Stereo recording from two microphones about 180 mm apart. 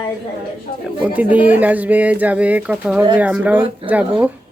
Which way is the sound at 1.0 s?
10° right (ahead or behind).